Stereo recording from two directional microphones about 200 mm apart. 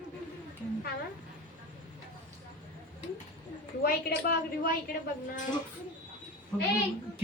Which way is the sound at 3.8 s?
50° left (ahead or behind).